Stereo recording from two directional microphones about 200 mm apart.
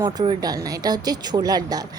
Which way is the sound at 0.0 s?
20° right (ahead or behind).